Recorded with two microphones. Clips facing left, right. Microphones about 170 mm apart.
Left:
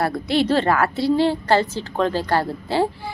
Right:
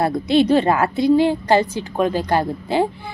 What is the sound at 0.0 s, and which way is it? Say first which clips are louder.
A woman's voice: right 4 dB; 20° right (ahead or behind).